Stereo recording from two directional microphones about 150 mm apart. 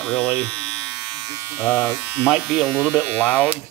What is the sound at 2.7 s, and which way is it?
Speech, 10° left (ahead or behind).